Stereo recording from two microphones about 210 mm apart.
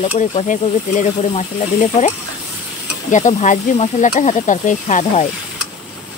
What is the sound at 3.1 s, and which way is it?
Speech, 35° left (ahead or behind).